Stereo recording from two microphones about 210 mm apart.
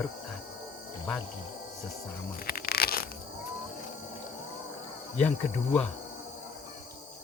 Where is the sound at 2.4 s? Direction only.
45° left (ahead or behind).